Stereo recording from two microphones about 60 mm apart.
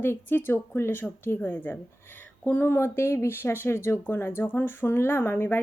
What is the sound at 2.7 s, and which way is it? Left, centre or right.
Speech, left.